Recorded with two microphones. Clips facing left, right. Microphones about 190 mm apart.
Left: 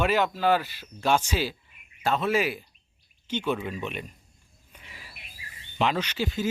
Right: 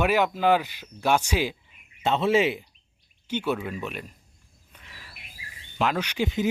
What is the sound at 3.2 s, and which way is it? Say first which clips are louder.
Speech: right 1 dB; 10° right (ahead or behind).